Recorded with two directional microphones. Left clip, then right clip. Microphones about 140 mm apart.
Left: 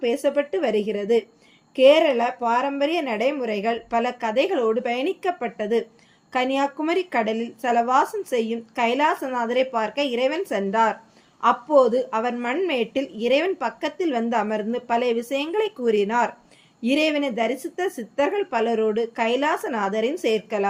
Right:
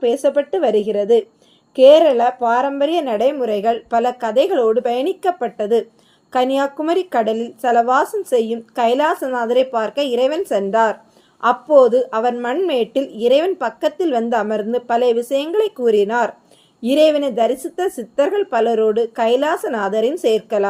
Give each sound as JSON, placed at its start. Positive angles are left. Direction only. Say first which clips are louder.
{"t": 0.0, "sound": "a woman's voice", "louder": "right 6 dB", "side_deg": -40}